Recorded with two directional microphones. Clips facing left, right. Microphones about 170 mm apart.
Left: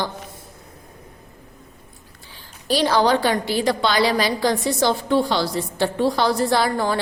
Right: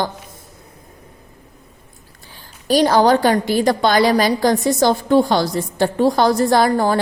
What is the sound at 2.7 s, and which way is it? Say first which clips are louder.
A woman's voice: right 5 dB; 45° right (ahead or behind).